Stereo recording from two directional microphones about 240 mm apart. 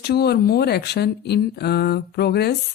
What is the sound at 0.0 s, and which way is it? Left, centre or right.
Speech, left.